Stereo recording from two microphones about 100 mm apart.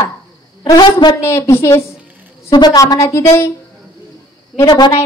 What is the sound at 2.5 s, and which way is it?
Speech, 45° left (ahead or behind).